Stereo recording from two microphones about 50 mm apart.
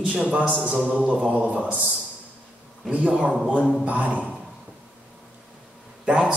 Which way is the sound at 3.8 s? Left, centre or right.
Right.